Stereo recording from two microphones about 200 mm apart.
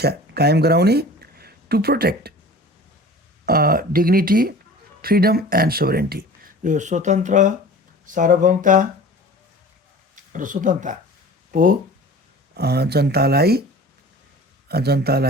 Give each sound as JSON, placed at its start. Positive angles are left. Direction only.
{"t": 0.0, "sound": "speech", "side_deg": -50}
{"t": 3.4, "sound": "speech", "side_deg": -50}
{"t": 10.3, "sound": "speech", "side_deg": -40}
{"t": 14.7, "sound": "speech", "side_deg": -50}